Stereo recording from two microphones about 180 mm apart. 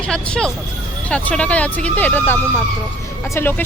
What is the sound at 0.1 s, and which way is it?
Speech, 5° left (ahead or behind).